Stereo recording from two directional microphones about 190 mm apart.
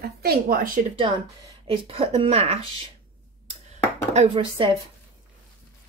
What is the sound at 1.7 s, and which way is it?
Speech, 25° right (ahead or behind).